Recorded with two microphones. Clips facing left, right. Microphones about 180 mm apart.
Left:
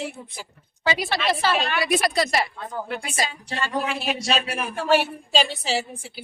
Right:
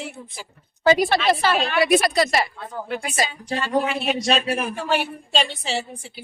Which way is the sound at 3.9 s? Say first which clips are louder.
Right 3 dB; centre (ahead or behind).